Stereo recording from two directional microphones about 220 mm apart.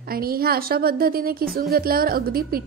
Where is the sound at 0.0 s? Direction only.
40° right (ahead or behind).